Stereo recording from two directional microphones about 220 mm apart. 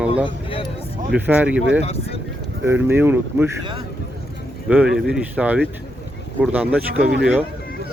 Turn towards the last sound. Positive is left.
turn(degrees=-5)  # may be behind; listen again after turning